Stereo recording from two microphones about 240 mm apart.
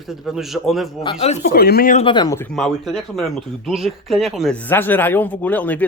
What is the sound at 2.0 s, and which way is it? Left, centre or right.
Speech, centre.